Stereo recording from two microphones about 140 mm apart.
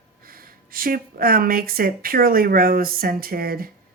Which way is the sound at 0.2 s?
90° right.